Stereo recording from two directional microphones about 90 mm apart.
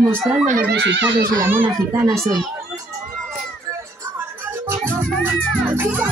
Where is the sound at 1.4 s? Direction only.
25° right (ahead or behind).